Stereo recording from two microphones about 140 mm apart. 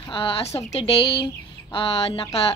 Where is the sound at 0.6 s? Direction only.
50° left (ahead or behind).